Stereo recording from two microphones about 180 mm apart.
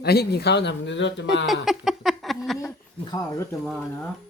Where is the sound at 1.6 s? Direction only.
Centre (ahead or behind).